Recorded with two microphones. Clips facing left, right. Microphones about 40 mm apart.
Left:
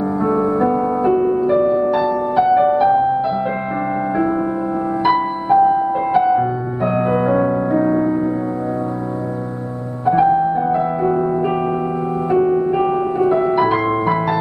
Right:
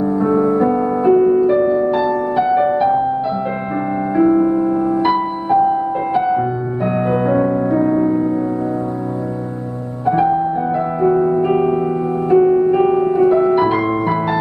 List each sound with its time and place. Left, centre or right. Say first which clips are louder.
0.2 s music: right 2 dB; left
1.0 s music: right 6 dB; centre
4.2 s music: right 10 dB; centre
6.9 s keyboard: even; centre
10.7 s music: right 1 dB; centre
12.3 s piano: right 4 dB; centre